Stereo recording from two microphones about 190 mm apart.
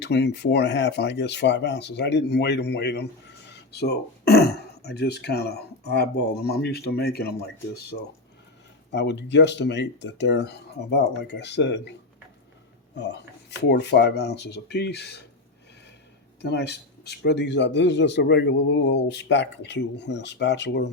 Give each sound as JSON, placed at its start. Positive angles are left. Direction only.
{"t": 0.0, "sound": "a man's voice", "side_deg": 65}
{"t": 13.7, "sound": "a man's voice", "side_deg": 60}
{"t": 16.4, "sound": "a man's voice", "side_deg": 60}